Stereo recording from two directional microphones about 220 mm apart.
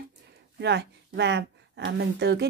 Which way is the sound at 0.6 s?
50° right (ahead or behind).